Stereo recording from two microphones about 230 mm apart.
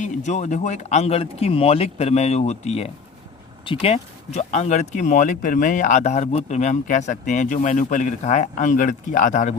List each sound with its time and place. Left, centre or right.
0.0 s speech: left